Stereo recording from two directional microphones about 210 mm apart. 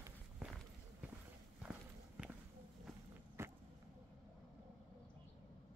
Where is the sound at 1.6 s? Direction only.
5° right (ahead or behind).